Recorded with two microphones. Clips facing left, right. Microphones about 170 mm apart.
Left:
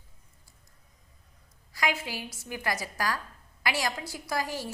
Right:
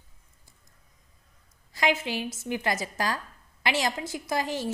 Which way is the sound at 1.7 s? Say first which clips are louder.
Right 4 dB; 25° right (ahead or behind).